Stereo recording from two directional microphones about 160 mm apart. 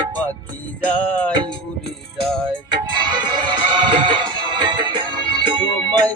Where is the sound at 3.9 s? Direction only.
30° right (ahead or behind).